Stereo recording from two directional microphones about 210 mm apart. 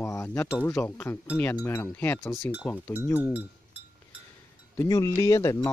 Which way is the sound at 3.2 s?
5° right (ahead or behind).